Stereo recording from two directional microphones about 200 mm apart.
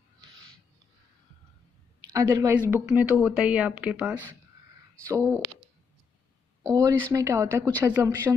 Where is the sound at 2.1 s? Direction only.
15° right (ahead or behind).